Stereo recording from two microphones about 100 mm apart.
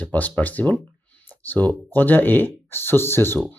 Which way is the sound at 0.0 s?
15° left (ahead or behind).